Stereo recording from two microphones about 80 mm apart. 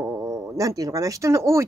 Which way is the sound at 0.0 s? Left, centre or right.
Right.